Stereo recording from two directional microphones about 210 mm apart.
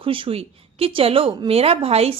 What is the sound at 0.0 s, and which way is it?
Speech, 25° right (ahead or behind).